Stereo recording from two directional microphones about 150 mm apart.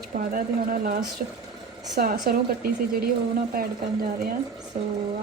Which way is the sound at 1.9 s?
80° right.